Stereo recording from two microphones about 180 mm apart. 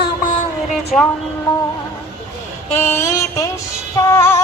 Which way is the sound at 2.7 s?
15° left (ahead or behind).